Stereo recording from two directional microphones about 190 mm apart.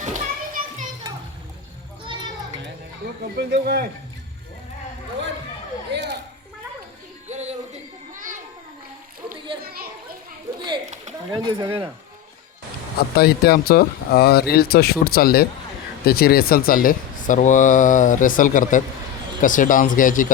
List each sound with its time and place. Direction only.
0.0 s children playing: 40° right (ahead or behind)
3.3 s speech: 55° right (ahead or behind)
5.9 s speech: 60° right (ahead or behind)
7.3 s children playing: 35° right (ahead or behind)
11.3 s speech: 20° right (ahead or behind)
13.1 s speech: 55° left (ahead or behind)